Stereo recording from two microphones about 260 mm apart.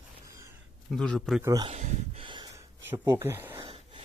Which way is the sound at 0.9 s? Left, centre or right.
Centre.